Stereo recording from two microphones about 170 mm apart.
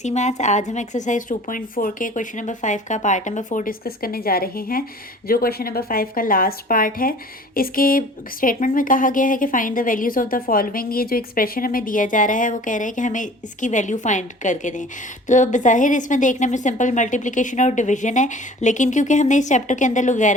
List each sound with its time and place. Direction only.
0.0 s speech: 45° left (ahead or behind)